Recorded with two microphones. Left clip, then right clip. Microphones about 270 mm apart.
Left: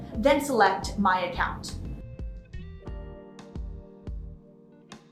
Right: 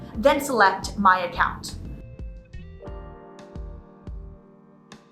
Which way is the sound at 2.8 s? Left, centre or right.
Centre.